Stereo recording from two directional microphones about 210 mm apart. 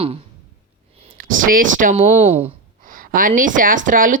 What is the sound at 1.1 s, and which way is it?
Speech, 40° right (ahead or behind).